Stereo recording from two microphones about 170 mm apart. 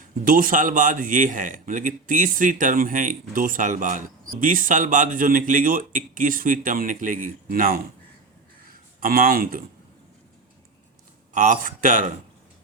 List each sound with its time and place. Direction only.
0.3 s a man's voice: 55° right (ahead or behind)
11.3 s a man's voice: 50° right (ahead or behind)